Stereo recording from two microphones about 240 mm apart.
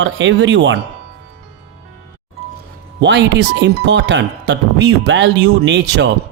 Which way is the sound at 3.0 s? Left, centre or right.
Right.